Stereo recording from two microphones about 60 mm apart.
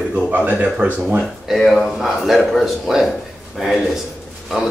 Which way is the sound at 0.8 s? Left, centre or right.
Right.